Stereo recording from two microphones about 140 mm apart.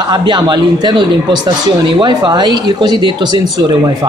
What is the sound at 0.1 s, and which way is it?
Speech, 30° right (ahead or behind).